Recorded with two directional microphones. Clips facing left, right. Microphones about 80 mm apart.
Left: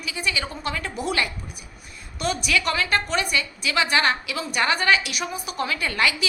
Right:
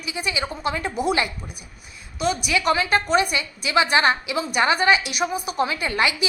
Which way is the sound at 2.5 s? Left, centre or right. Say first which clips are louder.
Right 2 dB; centre.